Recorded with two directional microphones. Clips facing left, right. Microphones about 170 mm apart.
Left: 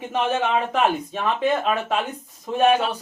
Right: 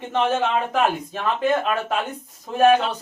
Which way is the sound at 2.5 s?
Centre (ahead or behind).